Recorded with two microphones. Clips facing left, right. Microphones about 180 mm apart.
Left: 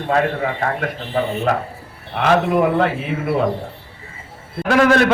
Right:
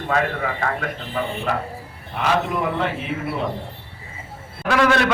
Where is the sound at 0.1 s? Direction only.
35° left (ahead or behind).